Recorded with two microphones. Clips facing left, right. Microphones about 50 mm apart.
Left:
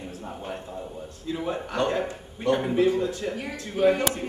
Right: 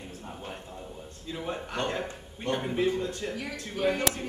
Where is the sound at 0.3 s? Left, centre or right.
Centre.